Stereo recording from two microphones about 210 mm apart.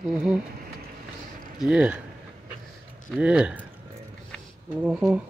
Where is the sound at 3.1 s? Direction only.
5° right (ahead or behind).